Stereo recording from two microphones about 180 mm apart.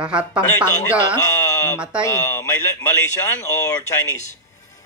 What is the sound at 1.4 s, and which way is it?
Sheep, 15° left (ahead or behind).